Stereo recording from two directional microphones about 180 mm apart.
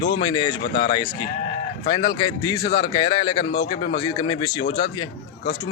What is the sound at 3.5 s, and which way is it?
Speech, 60° left (ahead or behind).